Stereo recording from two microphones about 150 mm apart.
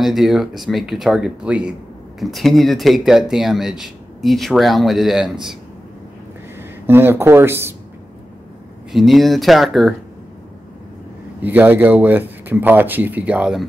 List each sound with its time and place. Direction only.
0.0 s speech: centre (ahead or behind)
6.9 s speech: 15° right (ahead or behind)
8.9 s speech: centre (ahead or behind)
11.4 s speech: 10° right (ahead or behind)